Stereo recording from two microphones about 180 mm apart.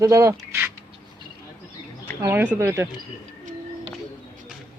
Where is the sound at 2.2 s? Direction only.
10° right (ahead or behind).